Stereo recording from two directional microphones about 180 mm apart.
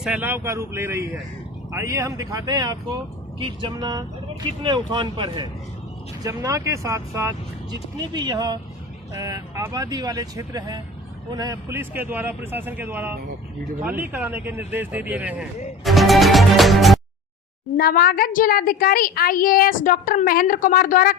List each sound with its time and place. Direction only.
0.0 s speech: 10° right (ahead or behind)
15.8 s music: centre (ahead or behind)
17.7 s a woman's voice: 60° left (ahead or behind)